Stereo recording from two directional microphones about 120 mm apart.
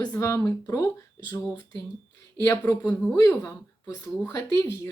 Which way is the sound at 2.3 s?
25° left (ahead or behind).